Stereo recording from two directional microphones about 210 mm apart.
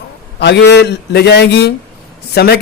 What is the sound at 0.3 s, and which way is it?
A man's voice, 50° left (ahead or behind).